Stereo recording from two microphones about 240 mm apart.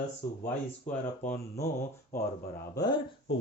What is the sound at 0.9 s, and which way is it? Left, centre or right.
Speech, centre.